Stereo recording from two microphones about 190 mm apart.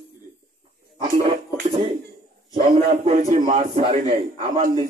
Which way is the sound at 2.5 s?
35° right (ahead or behind).